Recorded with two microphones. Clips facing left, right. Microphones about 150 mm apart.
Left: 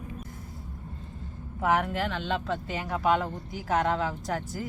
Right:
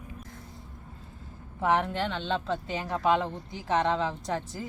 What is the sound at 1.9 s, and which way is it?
Speech, 30° right (ahead or behind).